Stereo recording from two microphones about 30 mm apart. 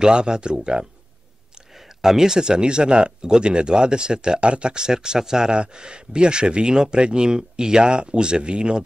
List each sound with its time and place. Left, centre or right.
0.0 s speech: right
2.0 s speech: centre
5.5 s speech: right